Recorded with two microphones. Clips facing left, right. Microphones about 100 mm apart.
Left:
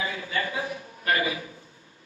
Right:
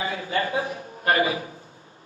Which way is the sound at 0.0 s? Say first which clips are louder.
Right 4 dB; 30° right (ahead or behind).